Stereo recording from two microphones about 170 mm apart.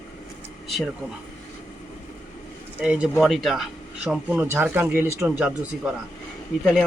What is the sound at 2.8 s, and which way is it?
Speech, 5° right (ahead or behind).